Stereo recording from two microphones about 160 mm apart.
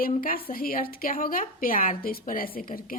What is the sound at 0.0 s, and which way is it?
A woman's voice, 65° left (ahead or behind).